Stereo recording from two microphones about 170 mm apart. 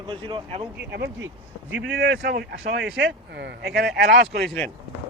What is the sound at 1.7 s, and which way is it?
Speech, 90° right.